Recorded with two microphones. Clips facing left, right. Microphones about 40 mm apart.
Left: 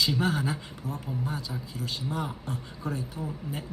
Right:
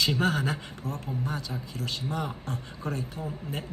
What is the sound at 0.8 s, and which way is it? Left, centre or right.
Speech, right.